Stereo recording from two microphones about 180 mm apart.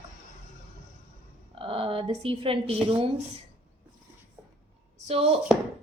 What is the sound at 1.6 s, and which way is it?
A woman's voice, 30° right (ahead or behind).